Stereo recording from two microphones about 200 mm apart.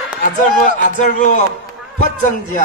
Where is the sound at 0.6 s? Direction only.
40° left (ahead or behind).